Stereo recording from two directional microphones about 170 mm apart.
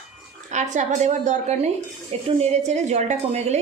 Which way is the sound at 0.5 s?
45° right (ahead or behind).